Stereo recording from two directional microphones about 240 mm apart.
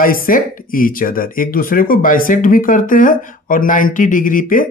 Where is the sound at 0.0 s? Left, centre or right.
Left.